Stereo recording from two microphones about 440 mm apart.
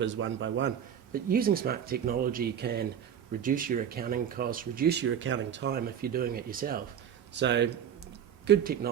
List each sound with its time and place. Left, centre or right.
0.0 s speech: right